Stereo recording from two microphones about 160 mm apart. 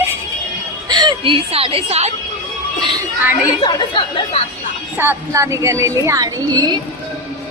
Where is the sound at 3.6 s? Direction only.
30° left (ahead or behind).